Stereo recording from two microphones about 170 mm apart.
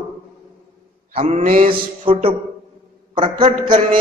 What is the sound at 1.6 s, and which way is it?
Mantra, 35° right (ahead or behind).